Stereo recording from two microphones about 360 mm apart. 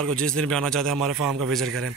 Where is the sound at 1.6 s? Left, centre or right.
Right.